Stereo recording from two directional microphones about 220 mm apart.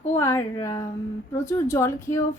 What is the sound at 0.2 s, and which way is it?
A woman's voice, 10° left (ahead or behind).